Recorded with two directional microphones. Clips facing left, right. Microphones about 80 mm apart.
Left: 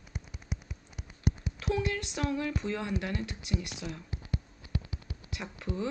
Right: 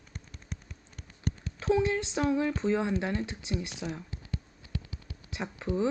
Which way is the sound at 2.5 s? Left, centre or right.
Right.